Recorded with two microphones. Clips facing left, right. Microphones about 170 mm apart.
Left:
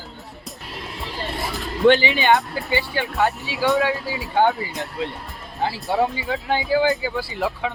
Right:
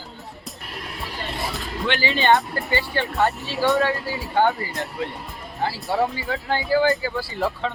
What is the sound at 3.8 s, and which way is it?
Speech, 15° left (ahead or behind).